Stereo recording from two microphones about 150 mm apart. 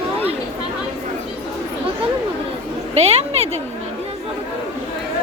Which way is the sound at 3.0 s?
45° right (ahead or behind).